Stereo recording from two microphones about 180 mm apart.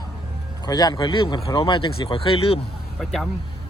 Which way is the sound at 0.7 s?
20° left (ahead or behind).